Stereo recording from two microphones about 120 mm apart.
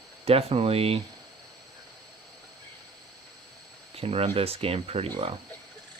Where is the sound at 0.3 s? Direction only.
55° right (ahead or behind).